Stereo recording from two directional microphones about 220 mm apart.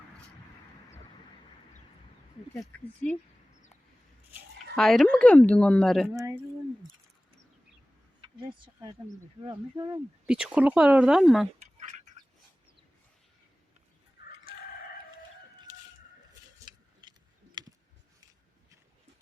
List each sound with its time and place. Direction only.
2.6 s speech: 5° left (ahead or behind)
4.7 s speech: centre (ahead or behind)
6.1 s speech: 15° right (ahead or behind)
8.2 s speech: 20° right (ahead or behind)
10.2 s speech: 5° right (ahead or behind)
11.6 s duck: 30° right (ahead or behind)
16.6 s scissors: 20° right (ahead or behind)